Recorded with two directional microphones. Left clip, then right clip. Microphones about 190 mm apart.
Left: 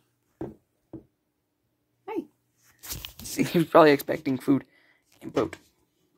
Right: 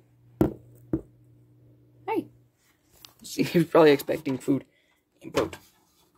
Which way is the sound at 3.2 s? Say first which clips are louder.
Right 1 dB; centre (ahead or behind).